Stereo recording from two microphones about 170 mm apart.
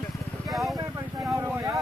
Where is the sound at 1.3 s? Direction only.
15° right (ahead or behind).